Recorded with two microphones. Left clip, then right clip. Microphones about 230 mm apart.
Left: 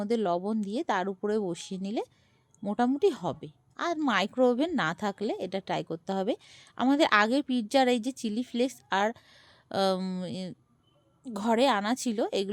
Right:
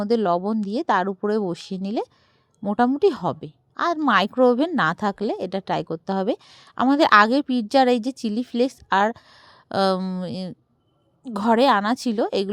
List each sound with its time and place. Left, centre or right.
0.0 s a woman's voice: centre